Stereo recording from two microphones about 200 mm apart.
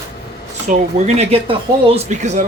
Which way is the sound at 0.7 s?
35° right (ahead or behind).